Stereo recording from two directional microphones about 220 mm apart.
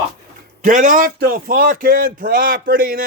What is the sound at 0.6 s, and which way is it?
A man's voice, 35° right (ahead or behind).